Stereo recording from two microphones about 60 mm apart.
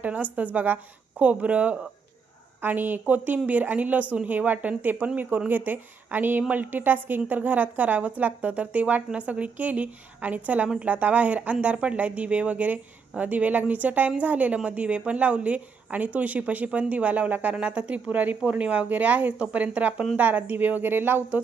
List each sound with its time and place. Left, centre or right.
0.0 s a woman's voice: right